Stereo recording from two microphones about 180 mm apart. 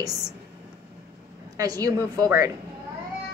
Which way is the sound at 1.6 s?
20° right (ahead or behind).